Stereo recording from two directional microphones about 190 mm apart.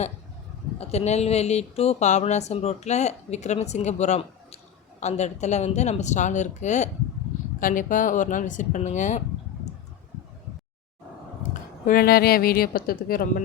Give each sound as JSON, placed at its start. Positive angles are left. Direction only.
{"t": 0.8, "sound": "speech", "side_deg": 35}
{"t": 11.5, "sound": "a woman's voice", "side_deg": 50}